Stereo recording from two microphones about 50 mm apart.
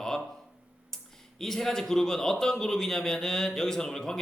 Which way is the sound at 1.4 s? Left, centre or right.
Centre.